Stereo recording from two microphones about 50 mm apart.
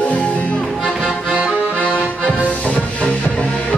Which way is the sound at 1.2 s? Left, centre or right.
Right.